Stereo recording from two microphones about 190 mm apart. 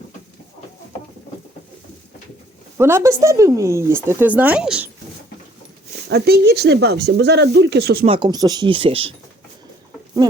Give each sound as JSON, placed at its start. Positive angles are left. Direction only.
{"t": 2.7, "sound": "speech", "side_deg": -15}
{"t": 6.1, "sound": "speech", "side_deg": -60}
{"t": 8.0, "sound": "speech", "side_deg": -25}